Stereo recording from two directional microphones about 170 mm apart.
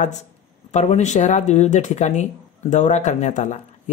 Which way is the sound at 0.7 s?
40° left (ahead or behind).